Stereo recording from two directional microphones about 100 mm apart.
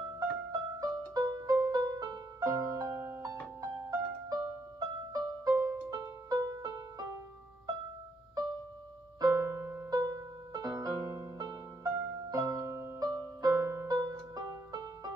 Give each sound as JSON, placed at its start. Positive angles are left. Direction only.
{"t": 0.5, "sound": "music", "side_deg": -35}
{"t": 9.2, "sound": "music", "side_deg": -25}